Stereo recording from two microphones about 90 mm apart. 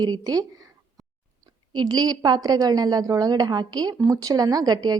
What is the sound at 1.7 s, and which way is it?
A woman's voice, 50° right (ahead or behind).